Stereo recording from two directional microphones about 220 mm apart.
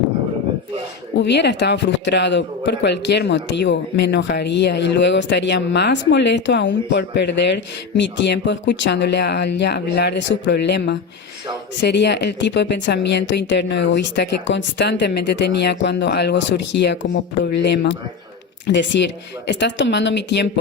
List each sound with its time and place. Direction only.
1.1 s a man's voice: 50° left (ahead or behind)